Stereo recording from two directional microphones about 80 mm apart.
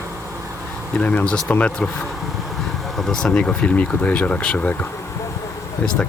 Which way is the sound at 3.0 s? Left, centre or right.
Centre.